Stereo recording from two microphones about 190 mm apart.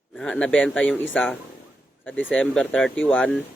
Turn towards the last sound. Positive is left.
turn(degrees=5)  # may be behind; listen again after turning